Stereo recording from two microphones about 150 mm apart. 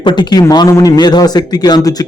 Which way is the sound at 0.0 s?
30° left (ahead or behind).